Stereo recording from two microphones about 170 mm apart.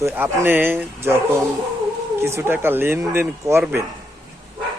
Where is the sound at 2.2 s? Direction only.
15° right (ahead or behind).